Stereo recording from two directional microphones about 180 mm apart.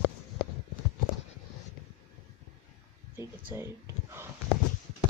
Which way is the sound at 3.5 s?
15° right (ahead or behind).